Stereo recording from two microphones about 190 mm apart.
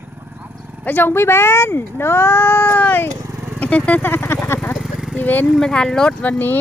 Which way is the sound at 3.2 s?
5° right (ahead or behind).